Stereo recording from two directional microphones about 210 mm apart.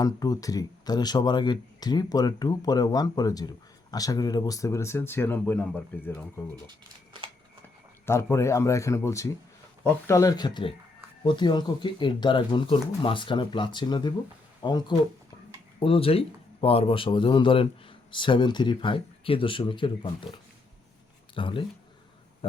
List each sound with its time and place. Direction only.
0.0 s speech: 15° left (ahead or behind)
6.7 s speech: 25° right (ahead or behind)
8.0 s speech: 15° left (ahead or behind)